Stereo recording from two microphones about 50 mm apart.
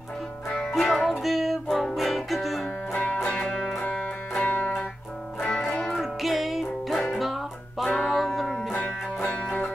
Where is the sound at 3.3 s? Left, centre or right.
Left.